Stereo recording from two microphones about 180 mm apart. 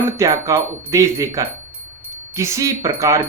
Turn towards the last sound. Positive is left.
turn(degrees=-15)  # may be behind; listen again after turning